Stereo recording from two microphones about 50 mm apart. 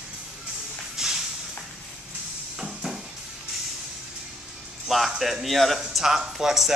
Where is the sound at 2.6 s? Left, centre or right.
Centre.